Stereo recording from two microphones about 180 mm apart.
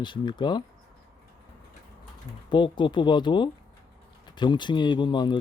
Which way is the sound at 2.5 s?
25° left (ahead or behind).